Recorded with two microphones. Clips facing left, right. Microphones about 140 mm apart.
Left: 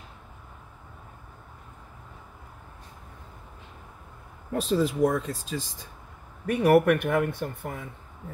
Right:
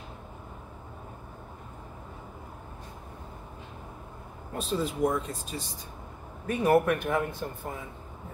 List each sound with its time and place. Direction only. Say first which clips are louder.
4.6 s speech: left 5 dB; 90° left
6.4 s speech: left 4 dB; 65° left (ahead or behind)